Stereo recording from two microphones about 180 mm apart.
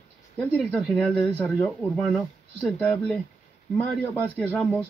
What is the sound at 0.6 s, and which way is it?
Speech, centre (ahead or behind).